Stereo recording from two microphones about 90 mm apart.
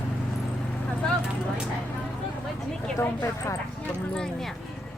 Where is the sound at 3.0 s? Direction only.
30° left (ahead or behind).